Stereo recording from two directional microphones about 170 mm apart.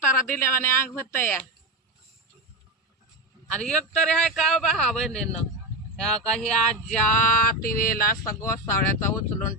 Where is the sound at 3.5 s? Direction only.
5° left (ahead or behind).